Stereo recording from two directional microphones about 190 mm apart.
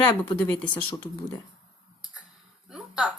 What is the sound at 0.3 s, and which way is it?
Speech, 10° left (ahead or behind).